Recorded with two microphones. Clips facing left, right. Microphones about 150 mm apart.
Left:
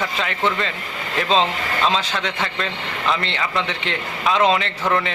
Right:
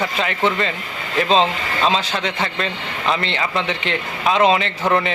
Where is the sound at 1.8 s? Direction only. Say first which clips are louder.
Right 2 dB; 20° right (ahead or behind).